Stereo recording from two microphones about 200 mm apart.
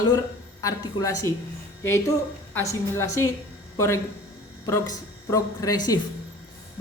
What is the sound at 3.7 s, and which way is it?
A woman's voice, 15° left (ahead or behind).